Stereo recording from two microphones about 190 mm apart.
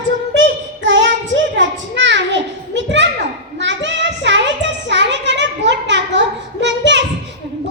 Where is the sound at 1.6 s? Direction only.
70° right (ahead or behind).